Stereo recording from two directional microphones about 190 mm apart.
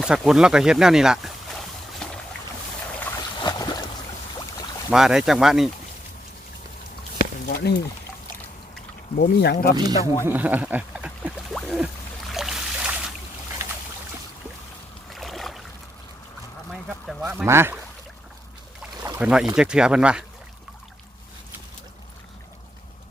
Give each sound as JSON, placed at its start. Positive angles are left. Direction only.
{"t": 0.0, "sound": "speech", "side_deg": -5}
{"t": 2.0, "sound": "a sound", "side_deg": 5}
{"t": 3.4, "sound": "boat", "side_deg": 20}
{"t": 4.9, "sound": "speech", "side_deg": 0}
{"t": 7.2, "sound": "a sound", "side_deg": 55}
{"t": 9.1, "sound": "speech", "side_deg": 55}
{"t": 9.7, "sound": "speech", "side_deg": -20}
{"t": 10.2, "sound": "a sound", "side_deg": -10}
{"t": 12.3, "sound": "boat", "side_deg": 0}
{"t": 15.1, "sound": "boat", "side_deg": 0}
{"t": 17.2, "sound": "speech", "side_deg": -15}
{"t": 19.2, "sound": "speech", "side_deg": -5}